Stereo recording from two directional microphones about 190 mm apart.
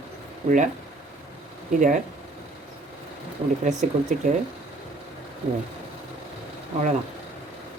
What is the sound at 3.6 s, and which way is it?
Speech, 40° right (ahead or behind).